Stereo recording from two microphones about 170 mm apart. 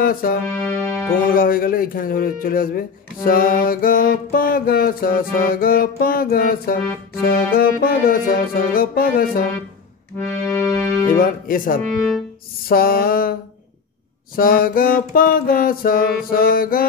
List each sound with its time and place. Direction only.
0.0 s music: 60° left (ahead or behind)
0.6 s music: 15° left (ahead or behind)
1.3 s music: 55° left (ahead or behind)
10.1 s music: 15° left (ahead or behind)
11.1 s music: 55° left (ahead or behind)
14.3 s music: 60° left (ahead or behind)